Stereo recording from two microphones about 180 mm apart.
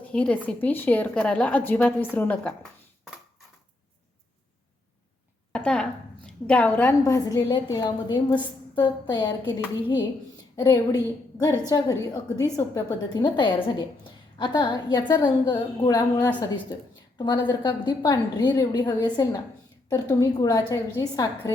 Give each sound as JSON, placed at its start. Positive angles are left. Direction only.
{"t": 0.0, "sound": "a woman's voice", "side_deg": 5}
{"t": 5.5, "sound": "a woman's voice", "side_deg": 5}
{"t": 10.6, "sound": "a woman's voice", "side_deg": 20}